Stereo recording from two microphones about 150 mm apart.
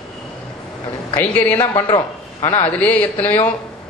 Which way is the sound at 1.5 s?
35° left (ahead or behind).